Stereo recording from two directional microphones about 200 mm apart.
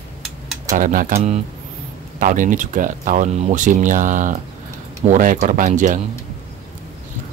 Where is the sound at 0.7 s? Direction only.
40° right (ahead or behind).